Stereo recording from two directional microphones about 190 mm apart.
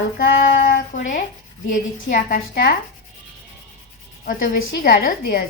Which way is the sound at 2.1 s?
45° left (ahead or behind).